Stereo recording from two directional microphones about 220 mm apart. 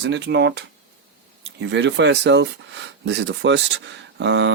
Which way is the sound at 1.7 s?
55° right (ahead or behind).